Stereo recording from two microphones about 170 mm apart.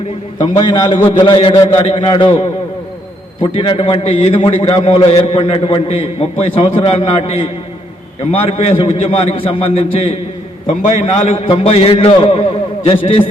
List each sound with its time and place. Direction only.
0.3 s a man's voice: 30° left (ahead or behind)
3.4 s a man's voice: 30° left (ahead or behind)